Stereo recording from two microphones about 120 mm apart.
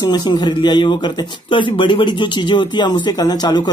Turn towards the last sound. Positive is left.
turn(degrees=35)  # may be behind; listen again after turning